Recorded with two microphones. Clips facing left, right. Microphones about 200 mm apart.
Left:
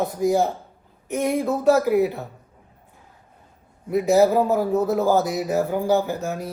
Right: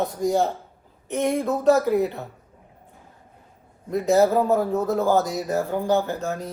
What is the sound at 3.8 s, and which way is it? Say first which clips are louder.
Speech: left 2 dB; 10° left (ahead or behind).